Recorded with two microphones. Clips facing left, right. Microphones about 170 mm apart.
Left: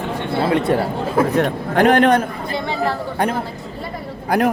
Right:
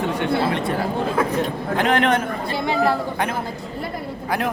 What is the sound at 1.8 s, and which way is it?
Speech, 45° left (ahead or behind).